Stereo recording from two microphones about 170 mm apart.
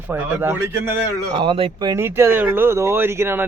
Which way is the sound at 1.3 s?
30° right (ahead or behind).